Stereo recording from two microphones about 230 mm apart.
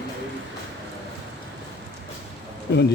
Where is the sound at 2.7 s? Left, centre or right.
Left.